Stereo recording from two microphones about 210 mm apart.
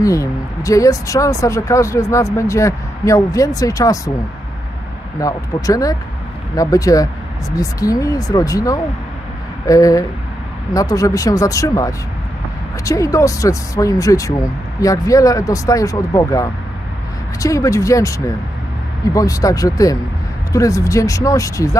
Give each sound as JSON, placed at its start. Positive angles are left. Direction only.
{"t": 0.0, "sound": "speech", "side_deg": 15}
{"t": 5.2, "sound": "speech", "side_deg": 15}